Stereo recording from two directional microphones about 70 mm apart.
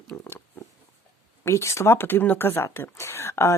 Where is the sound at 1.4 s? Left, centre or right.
Left.